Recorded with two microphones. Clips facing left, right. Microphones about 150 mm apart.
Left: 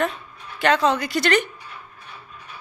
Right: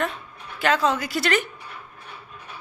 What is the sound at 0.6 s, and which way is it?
Speech, centre (ahead or behind).